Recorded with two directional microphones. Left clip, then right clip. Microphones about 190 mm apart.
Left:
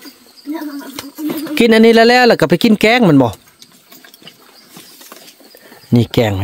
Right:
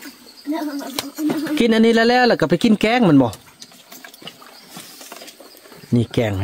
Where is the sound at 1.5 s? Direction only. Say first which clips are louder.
Left 8 dB; 30° left (ahead or behind).